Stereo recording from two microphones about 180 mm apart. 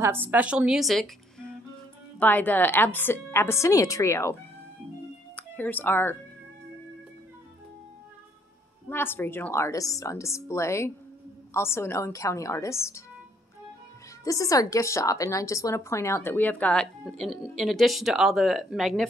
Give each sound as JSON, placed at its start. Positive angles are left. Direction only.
{"t": 0.0, "sound": "a woman's voice", "side_deg": -10}
{"t": 5.6, "sound": "a woman's voice", "side_deg": 10}
{"t": 8.8, "sound": "a woman's voice", "side_deg": 10}
{"t": 14.2, "sound": "a woman's voice", "side_deg": 20}